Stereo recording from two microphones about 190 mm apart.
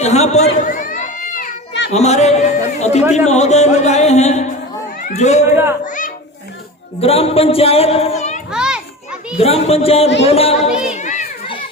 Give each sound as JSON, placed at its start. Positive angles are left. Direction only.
{"t": 0.0, "sound": "a sound", "side_deg": 35}
{"t": 1.9, "sound": "a man's voice", "side_deg": 35}
{"t": 7.0, "sound": "a man's voice", "side_deg": 30}
{"t": 8.5, "sound": "children playing", "side_deg": -5}
{"t": 9.4, "sound": "a man's voice", "side_deg": 30}
{"t": 11.0, "sound": "children playing", "side_deg": 40}